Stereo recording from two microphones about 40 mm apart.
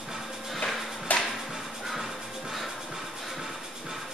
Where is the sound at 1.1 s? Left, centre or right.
Left.